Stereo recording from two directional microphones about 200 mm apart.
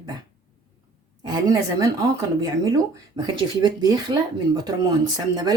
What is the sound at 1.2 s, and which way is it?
Speech, 20° right (ahead or behind).